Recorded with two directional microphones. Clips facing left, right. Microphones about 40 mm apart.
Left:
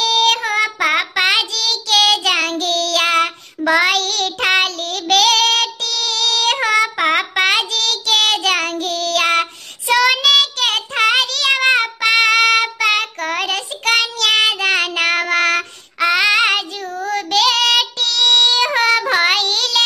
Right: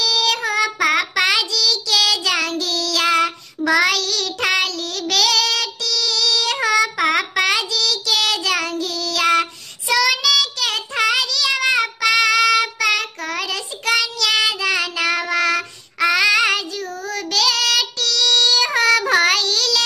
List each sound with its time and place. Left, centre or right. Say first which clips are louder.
0.0 s child singing: left 4 dB; left